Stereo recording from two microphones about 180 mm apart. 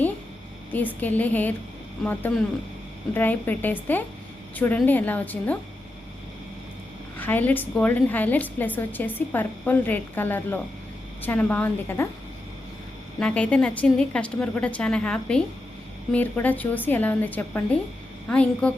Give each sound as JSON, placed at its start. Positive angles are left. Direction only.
{"t": 0.7, "sound": "a woman's voice", "side_deg": 10}
{"t": 7.2, "sound": "a woman's voice", "side_deg": 10}
{"t": 13.1, "sound": "a woman's voice", "side_deg": 5}